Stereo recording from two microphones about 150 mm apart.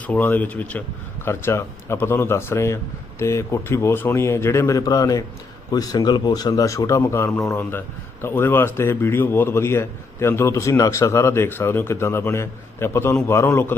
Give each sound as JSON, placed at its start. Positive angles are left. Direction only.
{"t": 0.1, "sound": "a man's voice", "side_deg": 10}